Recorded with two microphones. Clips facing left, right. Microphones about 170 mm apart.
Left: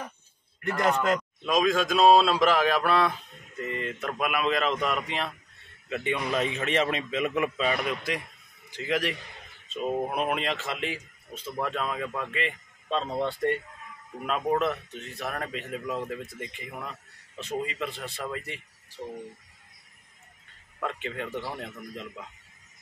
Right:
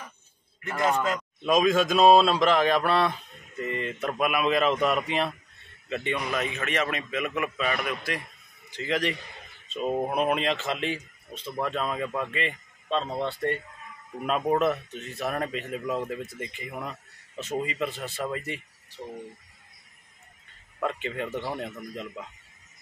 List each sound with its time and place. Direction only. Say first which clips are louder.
0.7 s a man's voice: even; 20° right (ahead or behind)
1.4 s speech: right 4 dB; 5° right (ahead or behind)
5.9 s a man's voice: even; 10° left (ahead or behind)
6.1 s a man's voice: left 4 dB; 30° left (ahead or behind)
8.6 s a man's voice: right 1 dB; 5° left (ahead or behind)
9.7 s speech: right 1 dB; 5° right (ahead or behind)
13.2 s speech: left 1 dB; 15° left (ahead or behind)
14.2 s speech: right 2 dB; 5° right (ahead or behind)
20.8 s speech: right 3 dB; 5° right (ahead or behind)